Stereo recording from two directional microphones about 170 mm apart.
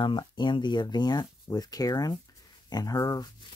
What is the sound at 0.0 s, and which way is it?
Speech, 30° left (ahead or behind).